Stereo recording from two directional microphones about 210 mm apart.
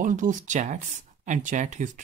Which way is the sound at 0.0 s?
40° right (ahead or behind).